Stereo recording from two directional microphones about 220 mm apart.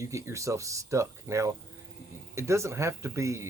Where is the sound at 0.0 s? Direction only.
15° right (ahead or behind).